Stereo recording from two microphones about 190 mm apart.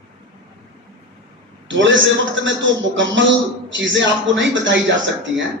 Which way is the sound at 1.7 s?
75° right (ahead or behind).